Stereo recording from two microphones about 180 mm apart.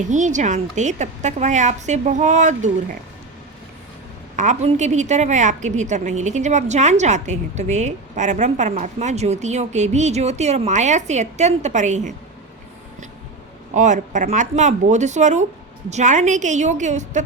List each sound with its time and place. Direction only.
0.0 s a woman's voice: 45° right (ahead or behind)
4.4 s a woman's voice: 40° right (ahead or behind)
13.7 s a woman's voice: 45° right (ahead or behind)